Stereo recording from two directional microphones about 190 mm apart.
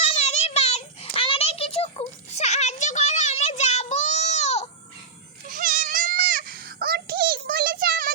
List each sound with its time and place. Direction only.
0.1 s child singing: 35° left (ahead or behind)
5.5 s goat: 45° right (ahead or behind)